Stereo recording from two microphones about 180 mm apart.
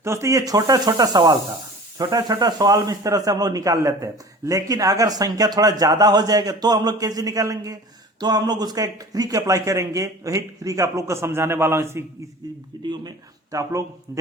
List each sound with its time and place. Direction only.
0.0 s a man's voice: 15° right (ahead or behind)